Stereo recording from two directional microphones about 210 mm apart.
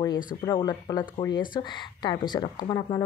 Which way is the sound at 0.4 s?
20° left (ahead or behind).